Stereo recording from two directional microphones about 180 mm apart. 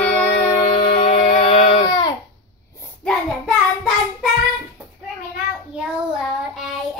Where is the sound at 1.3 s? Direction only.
30° left (ahead or behind).